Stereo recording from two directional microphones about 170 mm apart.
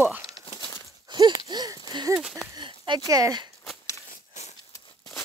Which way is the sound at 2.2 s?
Centre (ahead or behind).